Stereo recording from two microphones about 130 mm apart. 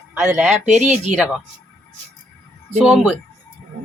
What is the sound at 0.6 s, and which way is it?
Speech, 65° right (ahead or behind).